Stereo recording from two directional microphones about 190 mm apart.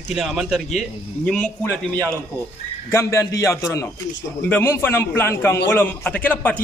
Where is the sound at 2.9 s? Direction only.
15° left (ahead or behind).